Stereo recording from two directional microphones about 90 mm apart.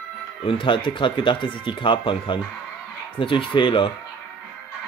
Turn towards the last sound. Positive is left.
turn(degrees=70)  # may be behind; listen again after turning